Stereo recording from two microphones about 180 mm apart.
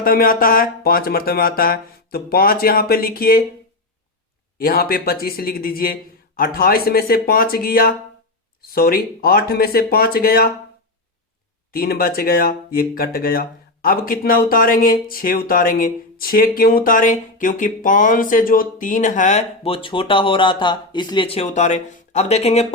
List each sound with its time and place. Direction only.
0.0 s speech: 55° left (ahead or behind)
4.5 s speech: 55° left (ahead or behind)
11.7 s speech: 55° left (ahead or behind); by 22.6 s 35° left (ahead or behind)